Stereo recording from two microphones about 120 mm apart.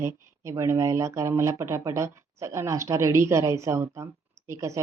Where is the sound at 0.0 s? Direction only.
25° right (ahead or behind).